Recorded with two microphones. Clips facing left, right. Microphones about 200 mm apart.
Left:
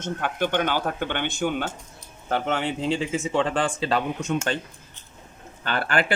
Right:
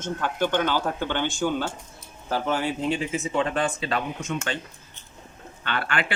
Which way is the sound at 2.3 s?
70° left (ahead or behind).